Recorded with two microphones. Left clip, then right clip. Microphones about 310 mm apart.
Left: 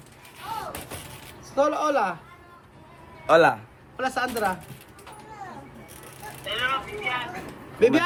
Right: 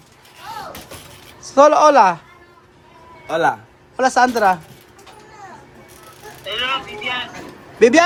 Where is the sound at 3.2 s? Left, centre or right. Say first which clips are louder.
Left 2 dB; centre.